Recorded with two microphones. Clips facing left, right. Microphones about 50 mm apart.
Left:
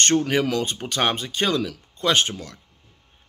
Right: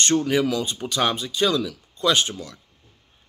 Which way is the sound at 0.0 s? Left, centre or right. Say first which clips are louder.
Even; left.